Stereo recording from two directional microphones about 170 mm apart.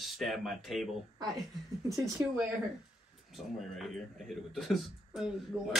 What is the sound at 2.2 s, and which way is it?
Speech, 15° right (ahead or behind).